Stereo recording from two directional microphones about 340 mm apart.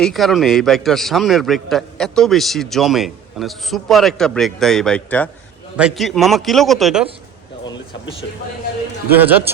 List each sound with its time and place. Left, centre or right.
0.0 s a man's voice: centre
7.6 s speech: centre
9.0 s a man's voice: centre